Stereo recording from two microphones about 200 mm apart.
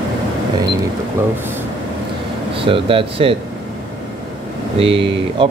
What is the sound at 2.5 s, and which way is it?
Speech, 25° right (ahead or behind).